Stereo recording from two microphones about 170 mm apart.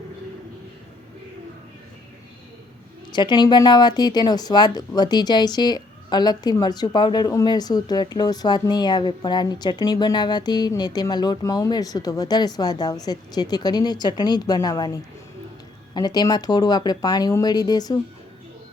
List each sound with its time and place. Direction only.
3.1 s speech: 25° left (ahead or behind)
16.0 s speech: 25° left (ahead or behind)